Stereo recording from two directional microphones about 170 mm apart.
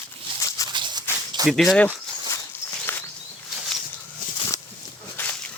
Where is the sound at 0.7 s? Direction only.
25° right (ahead or behind).